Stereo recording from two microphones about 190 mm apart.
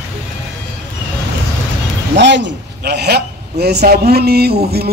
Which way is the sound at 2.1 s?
70° right (ahead or behind).